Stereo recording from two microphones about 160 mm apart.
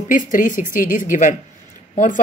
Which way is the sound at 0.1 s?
55° left (ahead or behind).